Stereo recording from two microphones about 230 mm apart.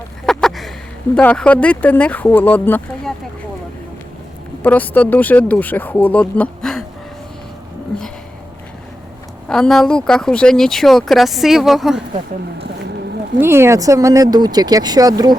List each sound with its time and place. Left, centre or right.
0.3 s a sound: centre
1.1 s speech: centre
4.6 s speech: centre
9.5 s speech: centre
13.4 s speech: centre